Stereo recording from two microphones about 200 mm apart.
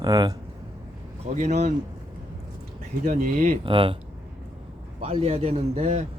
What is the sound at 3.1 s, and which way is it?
Speech, 40° right (ahead or behind).